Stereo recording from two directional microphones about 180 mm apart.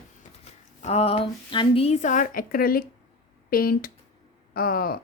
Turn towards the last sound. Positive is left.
turn(degrees=55)  # may be behind; listen again after turning